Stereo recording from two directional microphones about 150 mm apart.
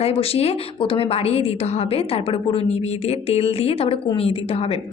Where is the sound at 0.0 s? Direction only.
40° left (ahead or behind).